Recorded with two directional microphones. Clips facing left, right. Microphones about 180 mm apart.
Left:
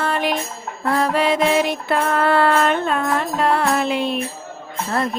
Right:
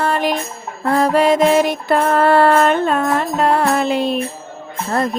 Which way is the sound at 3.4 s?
40° right (ahead or behind).